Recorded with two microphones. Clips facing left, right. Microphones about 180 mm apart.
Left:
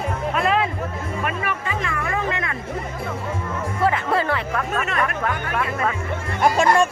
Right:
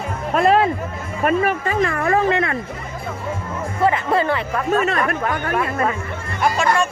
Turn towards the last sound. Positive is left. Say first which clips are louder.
# left 2 dB
turn(degrees=40)  # may be behind; listen again after turning